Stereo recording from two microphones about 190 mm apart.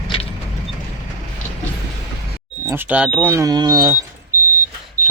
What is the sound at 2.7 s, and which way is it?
Speech, 10° right (ahead or behind).